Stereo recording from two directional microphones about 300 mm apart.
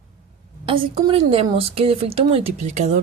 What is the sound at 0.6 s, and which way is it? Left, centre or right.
Speech, centre.